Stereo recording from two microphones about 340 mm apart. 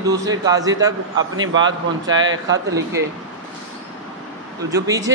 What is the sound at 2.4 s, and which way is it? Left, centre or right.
Speech, centre.